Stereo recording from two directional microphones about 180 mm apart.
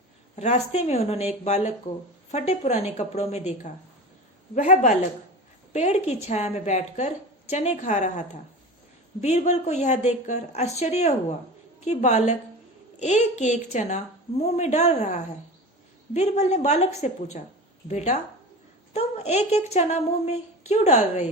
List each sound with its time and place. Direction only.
0.3 s a woman's voice: 40° left (ahead or behind)
9.2 s speech: 40° left (ahead or behind)